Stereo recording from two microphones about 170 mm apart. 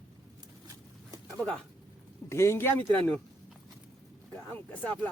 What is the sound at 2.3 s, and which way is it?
Speech, 15° left (ahead or behind).